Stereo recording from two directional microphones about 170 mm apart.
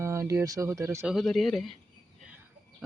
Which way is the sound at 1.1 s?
Centre (ahead or behind).